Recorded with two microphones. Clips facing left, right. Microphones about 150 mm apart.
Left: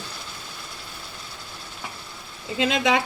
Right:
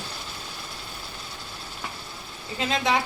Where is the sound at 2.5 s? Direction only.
90° left.